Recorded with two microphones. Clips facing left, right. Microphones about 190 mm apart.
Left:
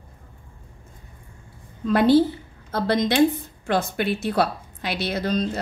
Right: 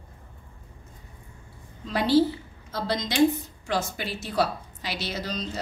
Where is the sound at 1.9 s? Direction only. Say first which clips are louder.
Left 5 dB; 55° left (ahead or behind).